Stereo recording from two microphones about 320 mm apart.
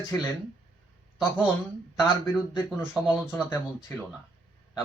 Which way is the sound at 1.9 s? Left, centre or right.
Centre.